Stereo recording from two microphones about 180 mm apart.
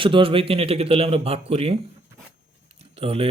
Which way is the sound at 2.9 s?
35° right (ahead or behind).